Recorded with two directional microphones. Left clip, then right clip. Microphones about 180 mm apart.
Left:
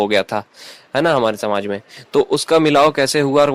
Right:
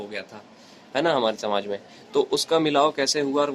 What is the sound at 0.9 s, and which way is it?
Speech, 45° left (ahead or behind).